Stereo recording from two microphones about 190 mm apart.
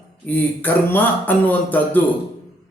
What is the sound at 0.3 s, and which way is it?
A man's voice, 10° left (ahead or behind).